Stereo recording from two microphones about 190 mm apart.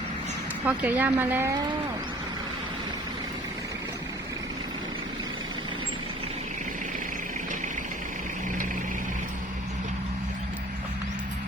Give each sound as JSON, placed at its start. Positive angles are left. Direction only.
{"t": 0.6, "sound": "speech", "side_deg": -10}